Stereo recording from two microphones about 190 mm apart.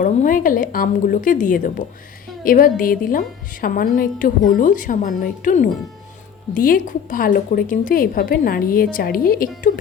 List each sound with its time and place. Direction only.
0.0 s a woman's voice: 45° left (ahead or behind)